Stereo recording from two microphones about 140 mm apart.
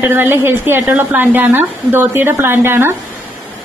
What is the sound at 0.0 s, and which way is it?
A woman's voice, 15° right (ahead or behind).